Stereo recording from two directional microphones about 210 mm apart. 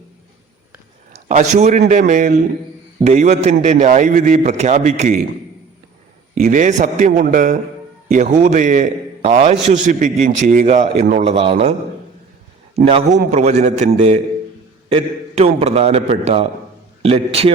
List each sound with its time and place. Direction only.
1.3 s a man's voice: 35° right (ahead or behind)
6.3 s a man's voice: 40° right (ahead or behind)
12.7 s a man's voice: 30° right (ahead or behind)